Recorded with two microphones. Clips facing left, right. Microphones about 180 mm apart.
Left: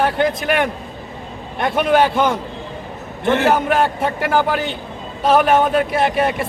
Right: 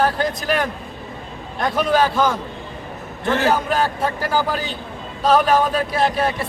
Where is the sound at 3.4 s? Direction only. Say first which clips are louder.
Left 2 dB; 65° left (ahead or behind).